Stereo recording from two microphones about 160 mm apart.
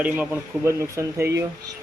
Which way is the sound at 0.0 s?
10° right (ahead or behind).